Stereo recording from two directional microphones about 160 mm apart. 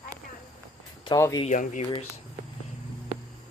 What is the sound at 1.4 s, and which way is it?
Speech, 50° left (ahead or behind).